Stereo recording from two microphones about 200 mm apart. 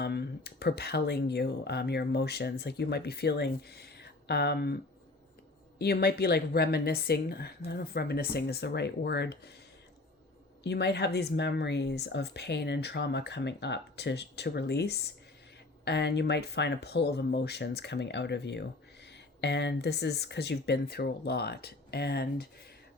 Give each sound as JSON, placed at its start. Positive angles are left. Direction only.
{"t": 0.0, "sound": "speech", "side_deg": 55}
{"t": 5.8, "sound": "a woman's voice", "side_deg": 55}
{"t": 10.6, "sound": "speech", "side_deg": 55}